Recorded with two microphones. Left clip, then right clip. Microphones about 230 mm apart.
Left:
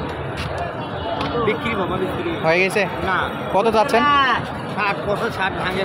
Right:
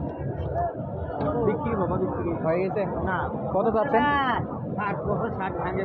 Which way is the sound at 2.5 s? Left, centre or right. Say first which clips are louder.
Left 9 dB; left.